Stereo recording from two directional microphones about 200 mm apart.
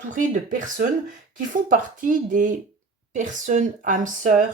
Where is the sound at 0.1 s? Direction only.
40° right (ahead or behind).